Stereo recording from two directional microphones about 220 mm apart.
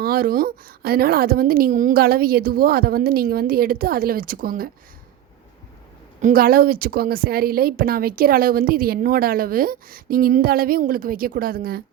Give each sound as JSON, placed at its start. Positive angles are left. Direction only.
{"t": 0.0, "sound": "a woman's voice", "side_deg": -45}
{"t": 6.2, "sound": "a woman's voice", "side_deg": -40}